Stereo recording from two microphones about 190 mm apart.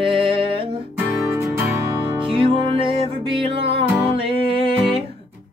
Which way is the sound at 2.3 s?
30° right (ahead or behind).